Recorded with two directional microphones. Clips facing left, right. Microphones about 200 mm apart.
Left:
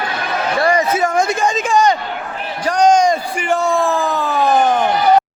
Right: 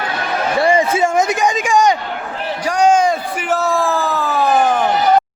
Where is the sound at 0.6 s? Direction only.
25° right (ahead or behind).